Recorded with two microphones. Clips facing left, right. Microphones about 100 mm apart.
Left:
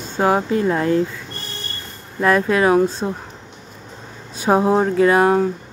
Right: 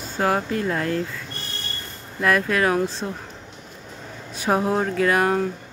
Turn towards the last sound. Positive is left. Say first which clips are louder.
# left 6 dB
turn(degrees=25)  # may be behind; listen again after turning